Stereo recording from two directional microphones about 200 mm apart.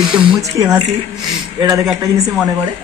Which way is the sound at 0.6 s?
20° right (ahead or behind).